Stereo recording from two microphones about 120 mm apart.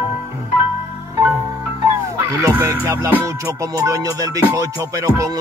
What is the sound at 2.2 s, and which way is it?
Music, 30° right (ahead or behind).